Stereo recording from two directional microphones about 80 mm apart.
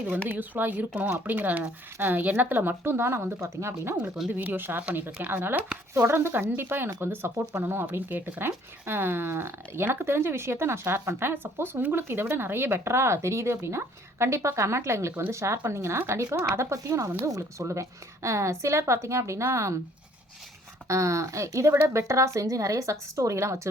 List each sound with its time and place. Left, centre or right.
0.3 s speech: right
3.9 s speech: centre
4.3 s a woman's voice: right
20.8 s a woman's voice: right